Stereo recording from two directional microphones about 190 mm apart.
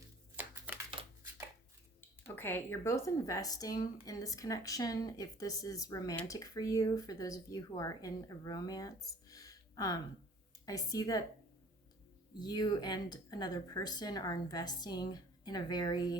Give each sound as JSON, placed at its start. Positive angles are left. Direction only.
{"t": 0.7, "sound": "shuffling cards", "side_deg": -10}
{"t": 2.0, "sound": "a woman's voice", "side_deg": 10}
{"t": 12.4, "sound": "speech", "side_deg": 20}